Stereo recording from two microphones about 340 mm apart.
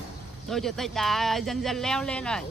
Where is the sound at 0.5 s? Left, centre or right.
Centre.